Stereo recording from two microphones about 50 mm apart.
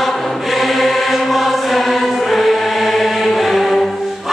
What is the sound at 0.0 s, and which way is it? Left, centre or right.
Choir, centre.